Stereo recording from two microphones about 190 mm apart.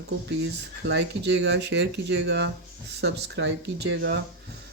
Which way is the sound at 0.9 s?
65° right (ahead or behind).